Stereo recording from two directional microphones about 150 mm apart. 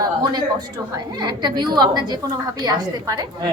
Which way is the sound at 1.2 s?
30° right (ahead or behind).